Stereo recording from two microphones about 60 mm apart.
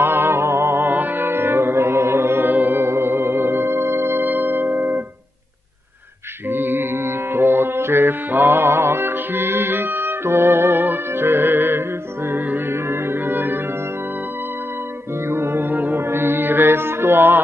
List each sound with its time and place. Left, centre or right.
0.0 s music: right
6.5 s mantra: right
12.3 s music: right
15.2 s music: right